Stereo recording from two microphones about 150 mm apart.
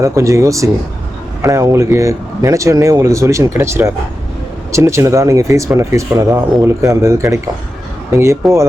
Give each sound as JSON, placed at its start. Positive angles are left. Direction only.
{"t": 0.0, "sound": "speech", "side_deg": -20}
{"t": 8.4, "sound": "speech", "side_deg": 0}